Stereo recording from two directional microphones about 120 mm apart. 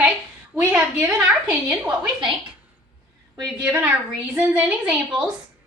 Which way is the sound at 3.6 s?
10° right (ahead or behind).